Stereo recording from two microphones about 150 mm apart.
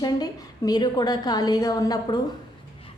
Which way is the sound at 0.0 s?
25° left (ahead or behind).